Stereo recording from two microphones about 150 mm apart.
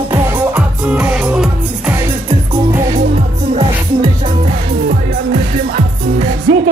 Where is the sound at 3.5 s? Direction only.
45° right (ahead or behind).